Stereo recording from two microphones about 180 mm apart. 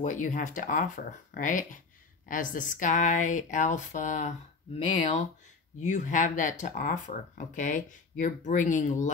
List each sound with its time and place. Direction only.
0.0 s speech: 45° left (ahead or behind)